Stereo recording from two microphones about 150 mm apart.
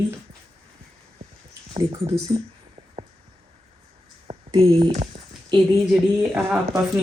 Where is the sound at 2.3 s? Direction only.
30° right (ahead or behind).